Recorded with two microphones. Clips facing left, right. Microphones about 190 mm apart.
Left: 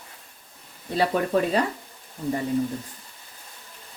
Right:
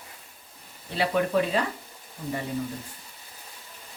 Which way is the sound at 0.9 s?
40° left (ahead or behind).